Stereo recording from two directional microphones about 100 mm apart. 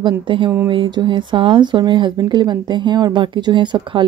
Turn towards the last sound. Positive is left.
turn(degrees=-55)  # may be behind; listen again after turning